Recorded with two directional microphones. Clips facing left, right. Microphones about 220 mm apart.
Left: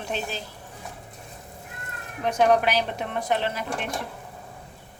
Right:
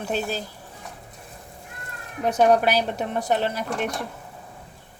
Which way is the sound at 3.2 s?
40° right (ahead or behind).